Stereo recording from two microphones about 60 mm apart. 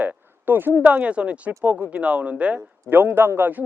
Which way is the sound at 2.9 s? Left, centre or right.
Right.